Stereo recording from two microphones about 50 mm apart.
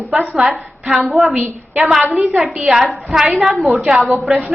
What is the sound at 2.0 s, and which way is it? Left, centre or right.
Speech, right.